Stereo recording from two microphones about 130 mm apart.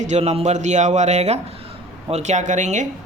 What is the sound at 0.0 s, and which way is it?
A man's voice, 60° right (ahead or behind).